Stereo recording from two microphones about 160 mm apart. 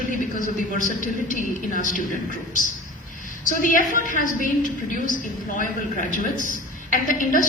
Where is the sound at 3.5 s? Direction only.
55° left (ahead or behind).